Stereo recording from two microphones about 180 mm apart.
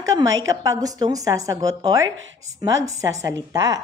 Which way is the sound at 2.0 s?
90° right.